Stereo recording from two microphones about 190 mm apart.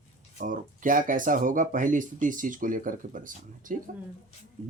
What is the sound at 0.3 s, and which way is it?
Speech, 45° right (ahead or behind).